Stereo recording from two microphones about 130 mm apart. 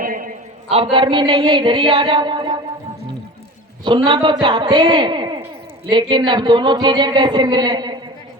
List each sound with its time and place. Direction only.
0.0 s a sound: 90° right
0.7 s speech: 45° right (ahead or behind)
3.8 s speech: 35° right (ahead or behind)